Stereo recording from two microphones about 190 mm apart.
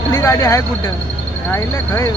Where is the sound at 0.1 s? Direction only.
15° left (ahead or behind).